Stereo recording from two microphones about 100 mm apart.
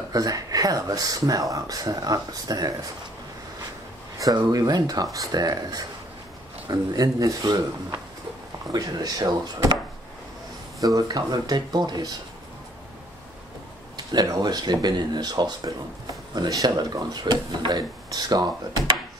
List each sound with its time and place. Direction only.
0.1 s speech: 40° right (ahead or behind)
4.5 s speech: 40° right (ahead or behind)
8.7 s speech: 40° right (ahead or behind)
10.8 s speech: 35° right (ahead or behind)
13.9 s speech: 40° right (ahead or behind)